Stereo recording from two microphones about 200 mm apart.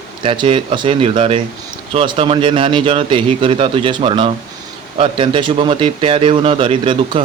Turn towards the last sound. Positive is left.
turn(degrees=-25)  # may be behind; listen again after turning